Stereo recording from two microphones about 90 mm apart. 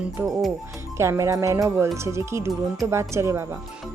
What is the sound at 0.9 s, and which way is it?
Speech, 30° right (ahead or behind).